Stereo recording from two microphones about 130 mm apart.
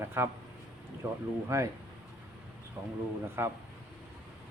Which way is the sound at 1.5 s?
20° right (ahead or behind).